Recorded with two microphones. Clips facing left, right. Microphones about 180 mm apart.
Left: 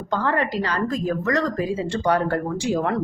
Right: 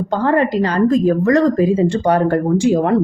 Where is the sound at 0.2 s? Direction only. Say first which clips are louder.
Right 9 dB; 45° right (ahead or behind).